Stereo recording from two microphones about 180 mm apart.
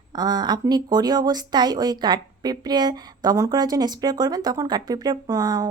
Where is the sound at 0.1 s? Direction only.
20° right (ahead or behind).